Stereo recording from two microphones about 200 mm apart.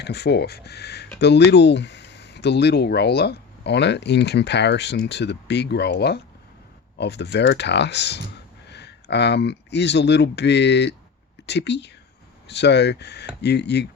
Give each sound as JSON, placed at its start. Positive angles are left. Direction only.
{"t": 0.0, "sound": "speech", "side_deg": 55}